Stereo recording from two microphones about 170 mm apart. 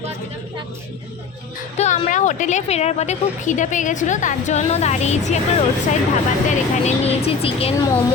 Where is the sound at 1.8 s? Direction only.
45° left (ahead or behind).